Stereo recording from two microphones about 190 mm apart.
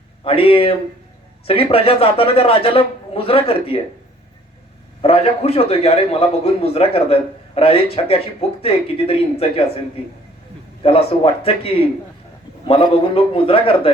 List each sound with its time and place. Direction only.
0.3 s a man's voice: 30° left (ahead or behind)
5.0 s a man's voice: 30° left (ahead or behind)
10.8 s a man's voice: 30° left (ahead or behind)